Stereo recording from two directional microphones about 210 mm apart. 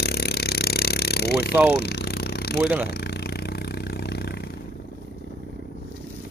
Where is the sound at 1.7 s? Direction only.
50° left (ahead or behind).